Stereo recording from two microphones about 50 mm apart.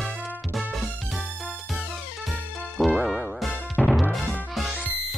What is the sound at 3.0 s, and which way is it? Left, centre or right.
Music, centre.